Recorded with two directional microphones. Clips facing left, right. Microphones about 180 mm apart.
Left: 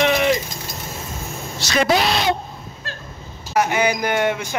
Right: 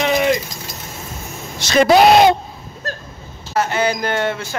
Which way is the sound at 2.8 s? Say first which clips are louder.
Right 8 dB; 45° right (ahead or behind).